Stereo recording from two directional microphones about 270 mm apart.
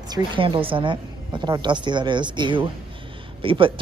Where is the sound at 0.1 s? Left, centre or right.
Centre.